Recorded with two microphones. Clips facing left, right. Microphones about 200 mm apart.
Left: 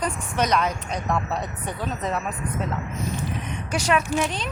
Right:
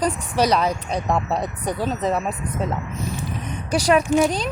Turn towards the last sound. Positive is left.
turn(degrees=-40)  # may be behind; listen again after turning